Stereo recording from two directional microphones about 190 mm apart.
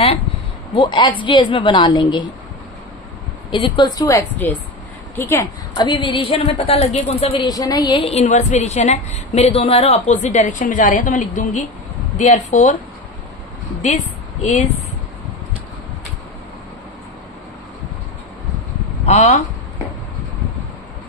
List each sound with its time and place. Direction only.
0.7 s a woman's voice: 25° left (ahead or behind)
3.5 s a woman's voice: 25° left (ahead or behind)
4.4 s a woman's voice: 10° left (ahead or behind)
5.8 s a woman's voice: 25° left (ahead or behind); by 12.7 s 40° left (ahead or behind)
13.8 s speech: 40° left (ahead or behind)
19.1 s a woman's voice: 40° left (ahead or behind)